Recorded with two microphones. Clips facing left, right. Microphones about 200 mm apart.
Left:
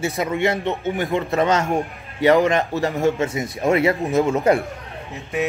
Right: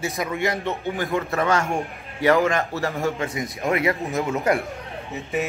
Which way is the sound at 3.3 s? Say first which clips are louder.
Left 5 dB; 30° left (ahead or behind).